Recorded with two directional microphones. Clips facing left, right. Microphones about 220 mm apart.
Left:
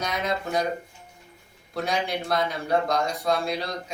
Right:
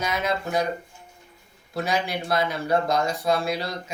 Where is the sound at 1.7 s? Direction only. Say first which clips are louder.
Right 1 dB; 5° right (ahead or behind).